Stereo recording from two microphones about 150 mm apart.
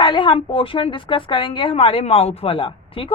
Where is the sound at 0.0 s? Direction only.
35° left (ahead or behind).